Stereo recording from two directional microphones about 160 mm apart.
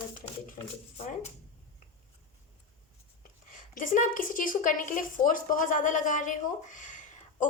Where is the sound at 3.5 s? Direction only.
55° left (ahead or behind).